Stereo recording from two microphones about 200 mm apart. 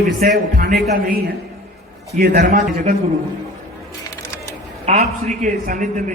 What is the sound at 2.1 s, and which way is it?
Speech, 55° right (ahead or behind).